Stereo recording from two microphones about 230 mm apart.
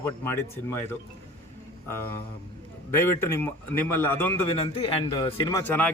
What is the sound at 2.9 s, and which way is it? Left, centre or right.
A man's voice, centre.